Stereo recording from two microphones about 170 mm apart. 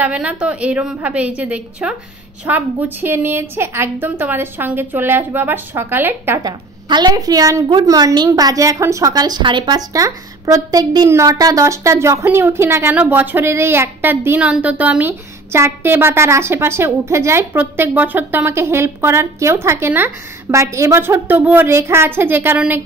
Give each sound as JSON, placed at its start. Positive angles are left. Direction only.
{"t": 0.0, "sound": "a woman's voice", "side_deg": -5}